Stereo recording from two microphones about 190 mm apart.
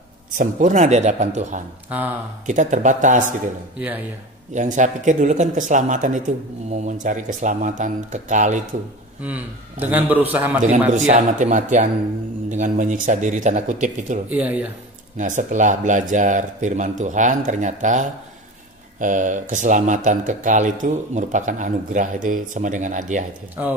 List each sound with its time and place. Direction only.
0.4 s speech: 40° right (ahead or behind)
1.9 s a man's voice: 10° right (ahead or behind)
2.4 s speech: 40° right (ahead or behind)
4.6 s speech: 40° right (ahead or behind)
9.2 s a man's voice: 10° right (ahead or behind)
11.1 s speech: 40° right (ahead or behind)
14.3 s a man's voice: 10° right (ahead or behind)
15.1 s speech: 40° right (ahead or behind)
23.6 s a man's voice: 10° right (ahead or behind)